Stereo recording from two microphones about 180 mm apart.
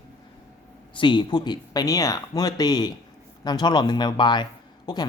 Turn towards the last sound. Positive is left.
turn(degrees=25)  # may be behind; listen again after turning